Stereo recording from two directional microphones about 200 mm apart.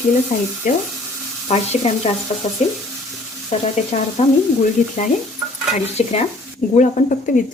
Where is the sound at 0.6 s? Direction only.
40° left (ahead or behind).